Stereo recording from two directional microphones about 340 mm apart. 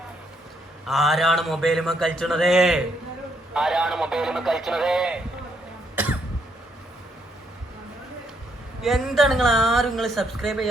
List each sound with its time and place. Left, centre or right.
0.9 s speech: centre
6.0 s cough: centre
8.8 s speech: centre